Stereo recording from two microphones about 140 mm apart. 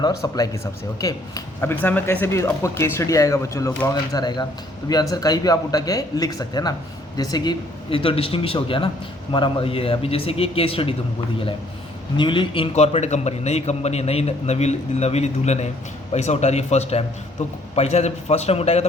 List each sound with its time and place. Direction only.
0.0 s a man's voice: 25° left (ahead or behind); by 10.9 s 40° left (ahead or behind)
12.1 s a man's voice: 35° left (ahead or behind)